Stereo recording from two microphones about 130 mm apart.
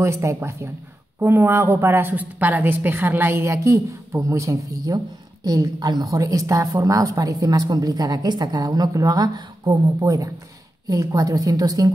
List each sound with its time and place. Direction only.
0.0 s a woman's voice: 20° right (ahead or behind)